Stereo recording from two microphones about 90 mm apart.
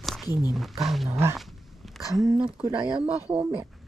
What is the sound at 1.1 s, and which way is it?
Speech, 30° right (ahead or behind).